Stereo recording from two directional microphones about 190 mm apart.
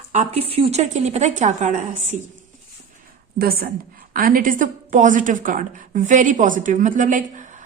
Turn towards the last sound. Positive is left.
turn(degrees=-40)  # may be behind; listen again after turning